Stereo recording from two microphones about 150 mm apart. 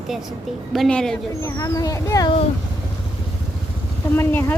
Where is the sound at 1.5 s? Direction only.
25° left (ahead or behind).